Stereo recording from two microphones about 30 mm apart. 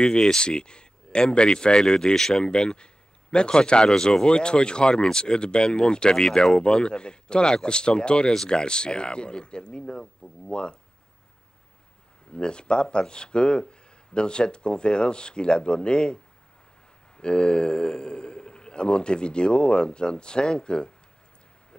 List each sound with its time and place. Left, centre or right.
0.0 s speech: left
2.1 s speech: centre
2.4 s a man's voice: left
12.4 s a man's voice: left
17.2 s a man's voice: left